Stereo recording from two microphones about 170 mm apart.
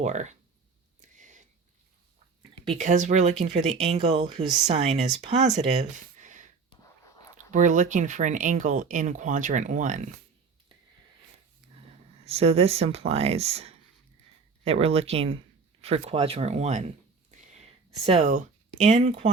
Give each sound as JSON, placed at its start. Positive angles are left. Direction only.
{"t": 0.0, "sound": "speech", "side_deg": -45}
{"t": 1.0, "sound": "a sound", "side_deg": -45}
{"t": 2.6, "sound": "speech", "side_deg": -45}
{"t": 7.5, "sound": "speech", "side_deg": -45}
{"t": 12.2, "sound": "speech", "side_deg": -35}
{"t": 17.3, "sound": "a sound", "side_deg": -45}